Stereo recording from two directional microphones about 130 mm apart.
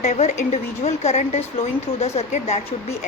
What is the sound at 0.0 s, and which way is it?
A woman's voice, 60° left (ahead or behind).